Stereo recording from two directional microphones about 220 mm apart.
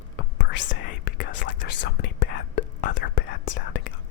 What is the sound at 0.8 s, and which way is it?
Whispering, 35° left (ahead or behind).